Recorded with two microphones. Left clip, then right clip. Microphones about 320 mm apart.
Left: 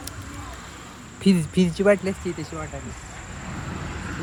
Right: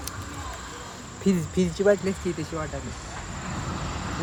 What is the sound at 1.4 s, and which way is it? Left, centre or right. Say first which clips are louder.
Speech: left 2 dB; left.